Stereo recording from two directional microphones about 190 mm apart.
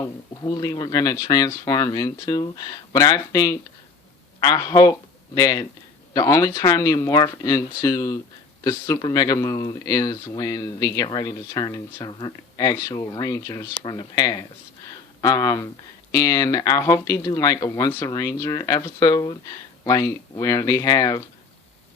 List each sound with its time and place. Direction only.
0.0 s speech: 20° left (ahead or behind)